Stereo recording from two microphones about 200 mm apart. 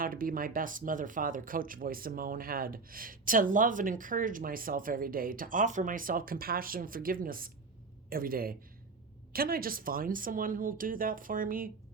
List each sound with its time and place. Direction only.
0.0 s speech: 45° right (ahead or behind)